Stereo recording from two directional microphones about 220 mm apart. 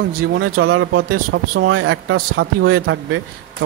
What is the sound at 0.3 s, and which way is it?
A man's voice, 65° right (ahead or behind).